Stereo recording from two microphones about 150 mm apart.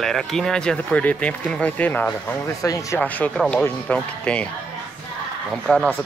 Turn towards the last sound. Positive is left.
turn(degrees=10)  # may be behind; listen again after turning